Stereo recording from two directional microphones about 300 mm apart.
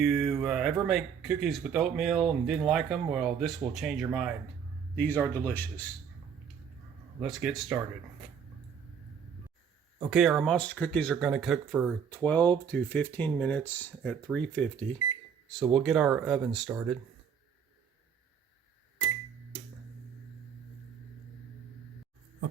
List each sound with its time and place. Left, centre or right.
0.0 s speech: centre
7.2 s speech: centre
10.1 s speech: centre